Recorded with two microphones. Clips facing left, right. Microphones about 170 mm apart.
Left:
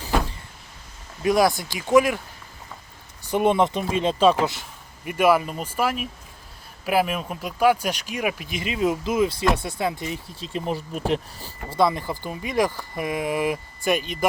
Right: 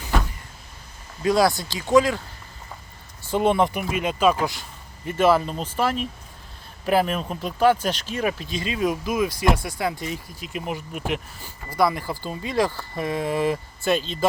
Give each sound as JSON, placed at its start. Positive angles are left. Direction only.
{"t": 1.2, "sound": "speech", "side_deg": 20}
{"t": 3.2, "sound": "speech", "side_deg": 20}
{"t": 5.0, "sound": "speech", "side_deg": 10}